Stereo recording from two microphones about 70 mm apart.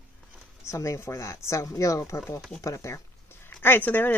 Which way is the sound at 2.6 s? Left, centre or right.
Left.